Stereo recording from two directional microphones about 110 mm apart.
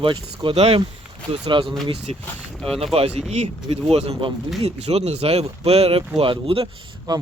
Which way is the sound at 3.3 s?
75° right (ahead or behind).